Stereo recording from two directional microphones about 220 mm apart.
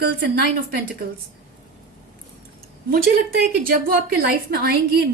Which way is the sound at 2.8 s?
40° right (ahead or behind).